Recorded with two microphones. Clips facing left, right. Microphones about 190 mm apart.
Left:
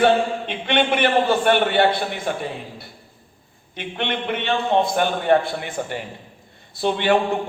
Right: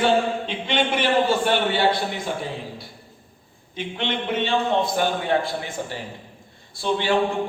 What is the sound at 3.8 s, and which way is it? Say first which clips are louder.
A man's voice: left 1 dB; 60° left (ahead or behind).